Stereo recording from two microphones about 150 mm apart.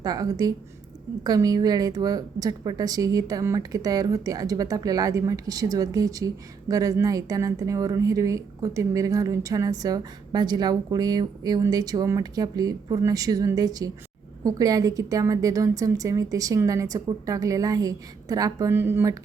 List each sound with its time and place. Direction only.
0.0 s speech: 25° right (ahead or behind)